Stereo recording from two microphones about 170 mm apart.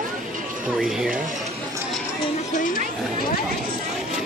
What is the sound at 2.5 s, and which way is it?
Speech, 50° left (ahead or behind).